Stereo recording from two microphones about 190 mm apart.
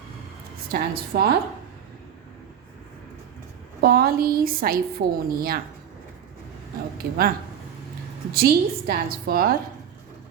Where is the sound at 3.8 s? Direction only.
55° right (ahead or behind).